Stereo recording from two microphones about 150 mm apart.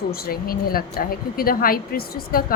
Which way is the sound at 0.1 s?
85° left.